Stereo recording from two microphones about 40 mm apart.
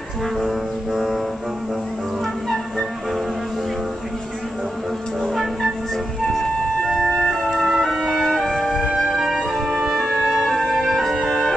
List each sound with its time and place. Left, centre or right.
0.4 s music: centre
5.3 s music: centre
7.2 s music: centre